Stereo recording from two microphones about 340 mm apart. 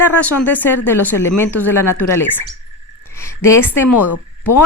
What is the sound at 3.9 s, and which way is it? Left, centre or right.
Speech, left.